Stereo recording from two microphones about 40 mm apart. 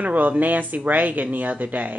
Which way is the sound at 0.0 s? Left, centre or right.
Right.